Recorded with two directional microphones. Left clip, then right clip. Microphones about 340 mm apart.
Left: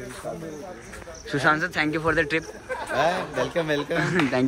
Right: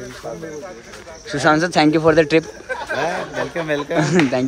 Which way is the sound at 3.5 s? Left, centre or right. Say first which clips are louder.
Right 6 dB; centre.